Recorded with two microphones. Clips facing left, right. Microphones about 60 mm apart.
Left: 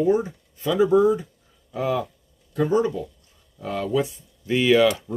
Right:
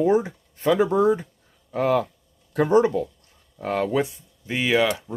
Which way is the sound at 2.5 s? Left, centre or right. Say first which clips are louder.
Right 3 dB; right.